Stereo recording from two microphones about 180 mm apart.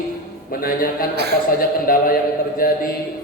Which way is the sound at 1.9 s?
55° left (ahead or behind).